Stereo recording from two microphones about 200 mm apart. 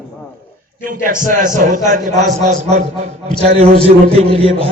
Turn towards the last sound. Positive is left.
turn(degrees=-30)  # may be behind; listen again after turning